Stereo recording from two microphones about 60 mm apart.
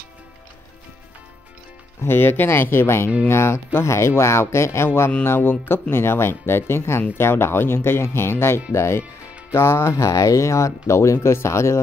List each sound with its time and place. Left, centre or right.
2.0 s speech: left